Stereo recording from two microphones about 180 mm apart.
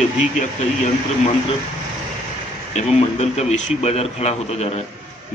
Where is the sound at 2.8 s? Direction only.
35° left (ahead or behind).